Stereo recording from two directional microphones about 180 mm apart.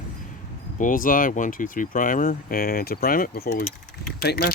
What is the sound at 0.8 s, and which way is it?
Speech, 50° left (ahead or behind).